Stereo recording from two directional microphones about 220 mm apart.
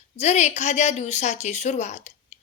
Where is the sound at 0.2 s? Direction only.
30° left (ahead or behind).